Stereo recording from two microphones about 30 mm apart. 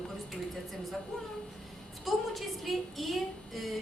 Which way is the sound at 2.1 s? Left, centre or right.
Centre.